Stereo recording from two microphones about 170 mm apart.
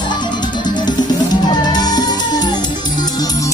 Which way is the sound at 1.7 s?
25° left (ahead or behind).